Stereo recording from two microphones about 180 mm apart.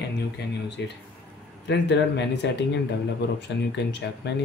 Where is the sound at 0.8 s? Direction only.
80° left.